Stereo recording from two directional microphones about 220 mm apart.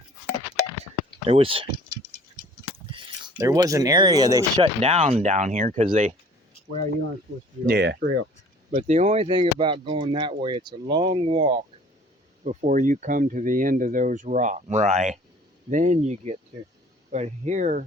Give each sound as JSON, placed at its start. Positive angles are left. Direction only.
{"t": 1.2, "sound": "speech", "side_deg": -25}
{"t": 2.9, "sound": "speech", "side_deg": -15}
{"t": 7.7, "sound": "speech", "side_deg": -45}
{"t": 8.7, "sound": "speech", "side_deg": -30}
{"t": 12.5, "sound": "speech", "side_deg": -35}